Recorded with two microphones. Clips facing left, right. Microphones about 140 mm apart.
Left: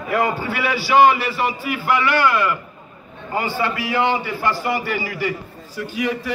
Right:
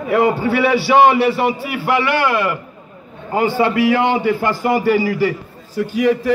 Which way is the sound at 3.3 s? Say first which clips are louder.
Right 7 dB; 60° right (ahead or behind).